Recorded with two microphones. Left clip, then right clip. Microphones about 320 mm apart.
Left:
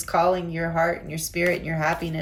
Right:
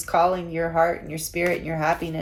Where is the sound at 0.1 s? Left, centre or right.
Centre.